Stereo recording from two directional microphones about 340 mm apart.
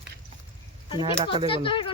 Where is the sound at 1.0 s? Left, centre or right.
Centre.